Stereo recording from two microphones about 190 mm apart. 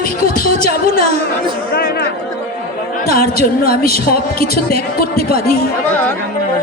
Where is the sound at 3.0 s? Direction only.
50° left (ahead or behind).